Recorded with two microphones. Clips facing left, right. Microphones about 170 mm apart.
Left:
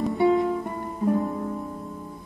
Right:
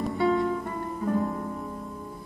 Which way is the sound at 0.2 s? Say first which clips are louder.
Left 4 dB; 20° left (ahead or behind).